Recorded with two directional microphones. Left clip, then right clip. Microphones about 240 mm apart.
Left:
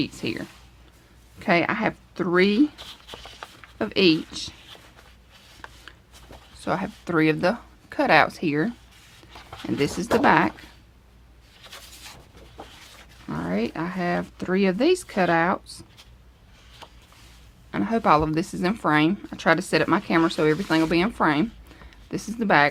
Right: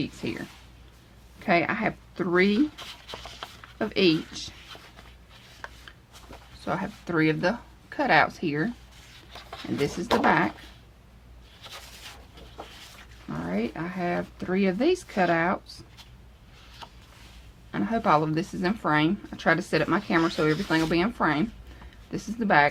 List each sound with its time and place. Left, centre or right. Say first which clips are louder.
0.0 s speech: left 4 dB; left
1.4 s speech: left 2 dB; left
3.8 s speech: left 3 dB; left
6.7 s speech: left 3 dB; left
13.2 s speech: left 3 dB; left
17.7 s speech: left 3 dB; left